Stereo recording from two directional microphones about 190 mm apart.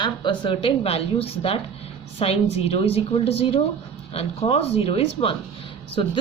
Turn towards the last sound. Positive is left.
turn(degrees=30)  # may be behind; listen again after turning